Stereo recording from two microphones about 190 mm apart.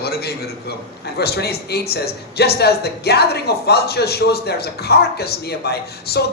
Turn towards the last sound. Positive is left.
turn(degrees=55)  # may be behind; listen again after turning